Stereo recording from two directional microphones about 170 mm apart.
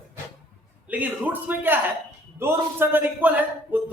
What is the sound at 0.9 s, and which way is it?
A man's voice, 10° right (ahead or behind).